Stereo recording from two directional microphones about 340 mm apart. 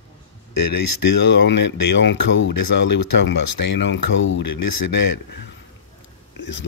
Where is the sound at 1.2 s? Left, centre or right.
Left.